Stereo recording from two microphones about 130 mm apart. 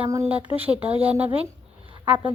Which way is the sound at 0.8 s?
50° right (ahead or behind).